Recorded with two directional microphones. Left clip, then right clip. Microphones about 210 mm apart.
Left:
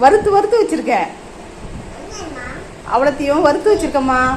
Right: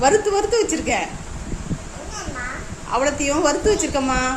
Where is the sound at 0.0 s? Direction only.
Centre (ahead or behind).